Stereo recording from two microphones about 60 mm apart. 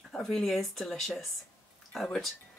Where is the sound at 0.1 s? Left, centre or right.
Centre.